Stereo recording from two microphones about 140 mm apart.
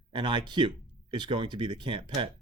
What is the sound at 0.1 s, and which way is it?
Speech, 35° right (ahead or behind).